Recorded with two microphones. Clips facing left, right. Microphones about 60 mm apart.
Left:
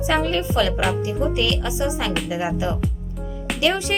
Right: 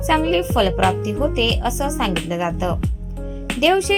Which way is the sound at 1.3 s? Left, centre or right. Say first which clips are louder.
Right 2 dB; right.